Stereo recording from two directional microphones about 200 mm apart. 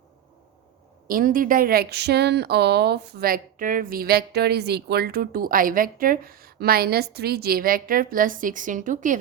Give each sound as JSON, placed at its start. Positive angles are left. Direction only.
{"t": 1.0, "sound": "speech", "side_deg": -45}